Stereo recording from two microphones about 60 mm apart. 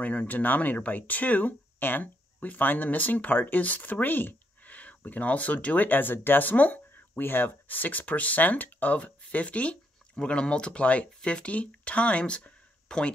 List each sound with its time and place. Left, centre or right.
0.0 s speech: left